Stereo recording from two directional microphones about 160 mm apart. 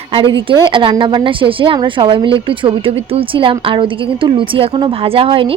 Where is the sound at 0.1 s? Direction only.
30° right (ahead or behind).